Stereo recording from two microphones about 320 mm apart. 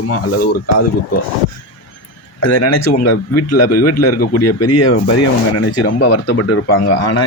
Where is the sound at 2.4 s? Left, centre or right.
Left.